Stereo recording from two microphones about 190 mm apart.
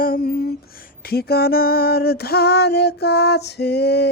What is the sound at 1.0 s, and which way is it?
Female singing, 55° left (ahead or behind).